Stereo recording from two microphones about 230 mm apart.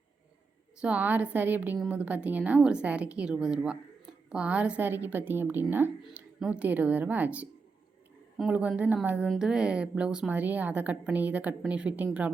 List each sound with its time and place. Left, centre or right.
0.8 s a woman's voice: centre